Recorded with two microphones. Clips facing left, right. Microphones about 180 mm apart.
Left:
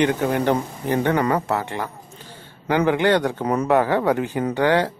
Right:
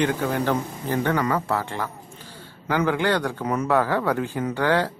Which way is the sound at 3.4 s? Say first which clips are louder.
Left 3 dB; 35° left (ahead or behind).